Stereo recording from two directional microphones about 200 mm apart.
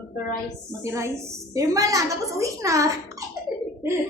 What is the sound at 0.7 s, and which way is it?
Speech, 15° right (ahead or behind).